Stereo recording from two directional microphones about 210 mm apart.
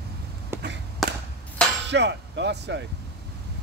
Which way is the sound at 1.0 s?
Centre (ahead or behind).